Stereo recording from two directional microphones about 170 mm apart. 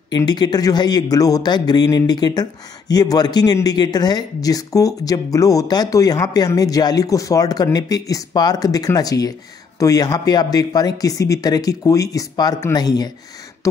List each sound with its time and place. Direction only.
0.1 s speech: 25° left (ahead or behind)